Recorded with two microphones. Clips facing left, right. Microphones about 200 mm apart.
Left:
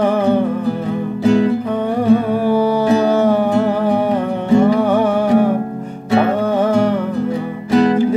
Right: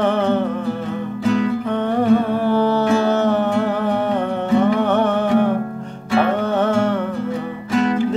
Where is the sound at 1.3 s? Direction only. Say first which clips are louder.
Left 5 dB; 30° left (ahead or behind).